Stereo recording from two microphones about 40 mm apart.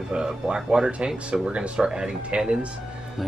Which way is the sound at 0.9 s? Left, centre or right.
Right.